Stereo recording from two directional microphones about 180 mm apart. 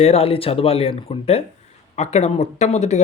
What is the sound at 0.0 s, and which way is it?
Speech, 35° left (ahead or behind).